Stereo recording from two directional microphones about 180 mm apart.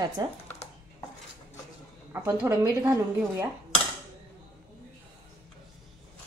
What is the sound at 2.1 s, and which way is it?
Speech, 15° right (ahead or behind).